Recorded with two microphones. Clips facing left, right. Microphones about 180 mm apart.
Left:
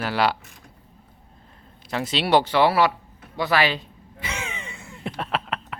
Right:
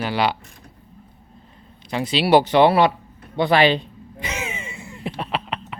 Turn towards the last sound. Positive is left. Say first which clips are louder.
# right 1 dB
turn(degrees=0)  # may be behind; listen again after turning